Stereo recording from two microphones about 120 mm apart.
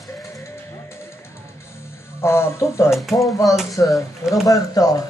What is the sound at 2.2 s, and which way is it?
Speech, 20° left (ahead or behind).